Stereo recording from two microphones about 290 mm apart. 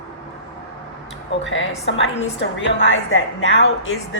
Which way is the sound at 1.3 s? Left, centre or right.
Left.